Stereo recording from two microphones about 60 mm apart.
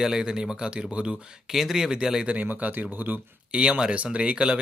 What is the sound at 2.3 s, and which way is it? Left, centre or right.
Speech, right.